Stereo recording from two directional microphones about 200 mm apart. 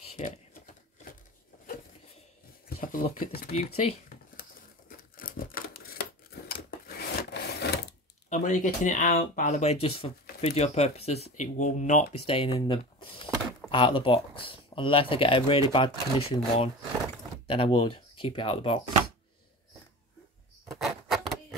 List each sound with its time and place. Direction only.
0.2 s speech: 35° left (ahead or behind)
2.7 s speech: 45° left (ahead or behind)
4.1 s crumpling: 45° left (ahead or behind)
6.5 s rub: 50° left (ahead or behind)
8.3 s speech: 35° left (ahead or behind)
20.6 s a sound: centre (ahead or behind)